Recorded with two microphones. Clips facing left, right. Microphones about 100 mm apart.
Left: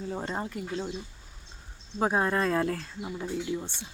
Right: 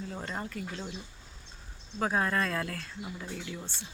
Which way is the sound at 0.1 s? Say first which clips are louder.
Left 4 dB; 25° left (ahead or behind).